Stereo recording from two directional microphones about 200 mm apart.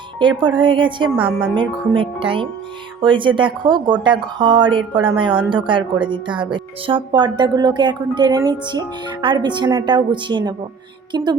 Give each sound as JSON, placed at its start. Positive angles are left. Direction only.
{"t": 0.2, "sound": "speech", "side_deg": -25}